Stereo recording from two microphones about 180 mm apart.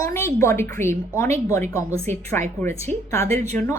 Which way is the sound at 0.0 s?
15° left (ahead or behind).